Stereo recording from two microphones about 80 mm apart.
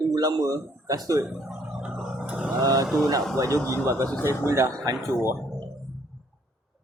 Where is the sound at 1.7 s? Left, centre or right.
Centre.